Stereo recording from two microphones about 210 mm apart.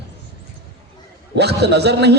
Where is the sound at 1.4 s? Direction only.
50° right (ahead or behind).